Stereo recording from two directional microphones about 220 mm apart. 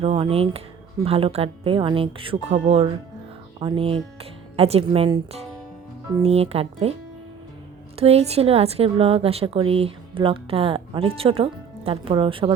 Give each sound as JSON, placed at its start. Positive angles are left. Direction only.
{"t": 0.0, "sound": "a woman's voice", "side_deg": -25}
{"t": 7.9, "sound": "a woman's voice", "side_deg": -25}